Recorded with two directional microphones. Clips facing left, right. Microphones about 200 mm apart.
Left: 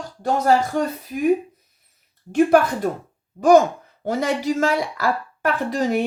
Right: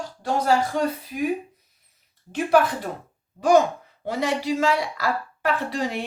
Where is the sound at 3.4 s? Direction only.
45° left (ahead or behind).